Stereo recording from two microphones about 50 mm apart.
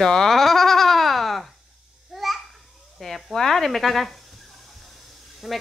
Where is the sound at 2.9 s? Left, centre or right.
Centre.